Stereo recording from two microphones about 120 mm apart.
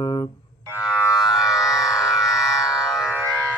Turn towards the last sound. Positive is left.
turn(degrees=-5)  # may be behind; listen again after turning